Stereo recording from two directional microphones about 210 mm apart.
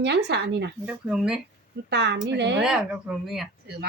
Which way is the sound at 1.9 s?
55° right (ahead or behind).